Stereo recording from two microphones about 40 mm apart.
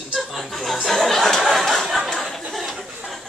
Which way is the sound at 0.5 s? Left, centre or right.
Centre.